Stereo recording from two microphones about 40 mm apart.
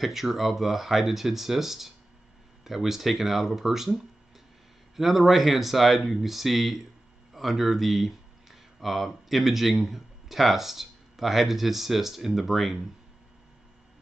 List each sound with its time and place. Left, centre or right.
0.0 s speech: centre